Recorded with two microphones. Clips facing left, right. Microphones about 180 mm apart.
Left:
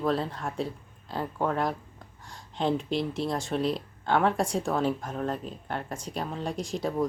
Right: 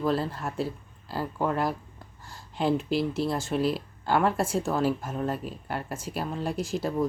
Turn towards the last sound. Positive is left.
turn(degrees=-5)  # may be behind; listen again after turning